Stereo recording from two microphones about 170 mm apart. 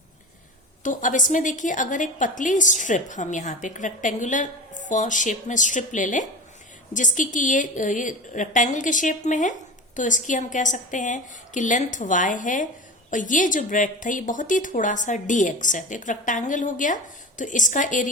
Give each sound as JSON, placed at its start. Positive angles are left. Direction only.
{"t": 0.8, "sound": "a woman's voice", "side_deg": 50}